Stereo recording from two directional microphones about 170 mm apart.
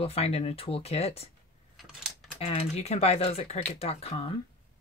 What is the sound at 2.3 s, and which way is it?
Speech, 40° left (ahead or behind).